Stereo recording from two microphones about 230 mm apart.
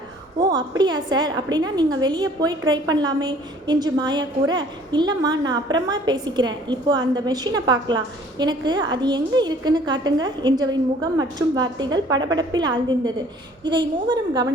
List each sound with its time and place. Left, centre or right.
0.3 s a woman's voice: centre